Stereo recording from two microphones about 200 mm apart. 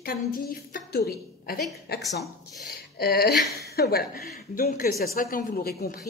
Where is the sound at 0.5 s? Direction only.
50° left (ahead or behind).